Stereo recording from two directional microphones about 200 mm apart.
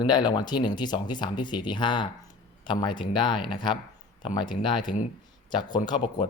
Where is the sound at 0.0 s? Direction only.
20° left (ahead or behind).